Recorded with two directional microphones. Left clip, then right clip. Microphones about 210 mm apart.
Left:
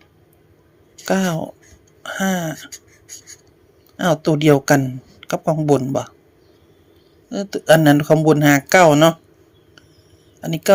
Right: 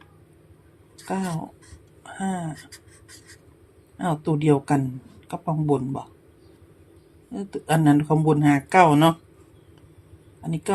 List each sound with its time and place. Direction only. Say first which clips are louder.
0.9 s speech: left 10 dB; 35° left (ahead or behind)
3.9 s speech: left 8 dB; 30° left (ahead or behind)
7.3 s speech: left 12 dB; 35° left (ahead or behind)
10.4 s speech: left 8 dB; 30° left (ahead or behind)